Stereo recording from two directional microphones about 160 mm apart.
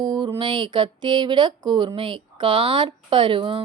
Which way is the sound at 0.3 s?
30° right (ahead or behind).